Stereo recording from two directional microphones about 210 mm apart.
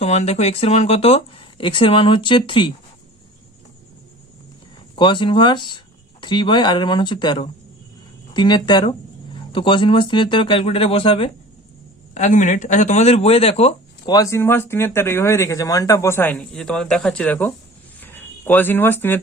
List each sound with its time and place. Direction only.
0.0 s speech: 30° left (ahead or behind)
4.9 s speech: 25° left (ahead or behind)